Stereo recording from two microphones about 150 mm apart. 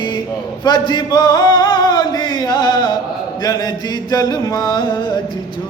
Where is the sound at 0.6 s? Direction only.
30° left (ahead or behind).